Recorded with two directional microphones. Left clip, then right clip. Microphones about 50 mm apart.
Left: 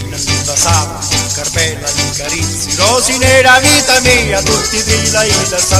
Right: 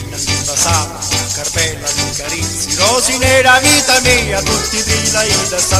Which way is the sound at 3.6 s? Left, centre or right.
Right.